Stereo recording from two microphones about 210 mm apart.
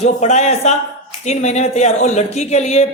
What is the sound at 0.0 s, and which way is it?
Speech, 30° left (ahead or behind).